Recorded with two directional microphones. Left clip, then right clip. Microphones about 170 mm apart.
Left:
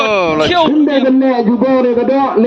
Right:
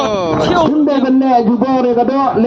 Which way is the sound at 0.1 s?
10° right (ahead or behind).